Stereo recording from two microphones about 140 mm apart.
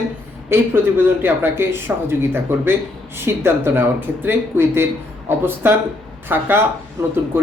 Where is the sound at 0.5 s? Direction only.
15° right (ahead or behind).